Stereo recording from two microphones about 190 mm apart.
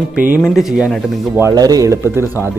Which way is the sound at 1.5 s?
20° right (ahead or behind).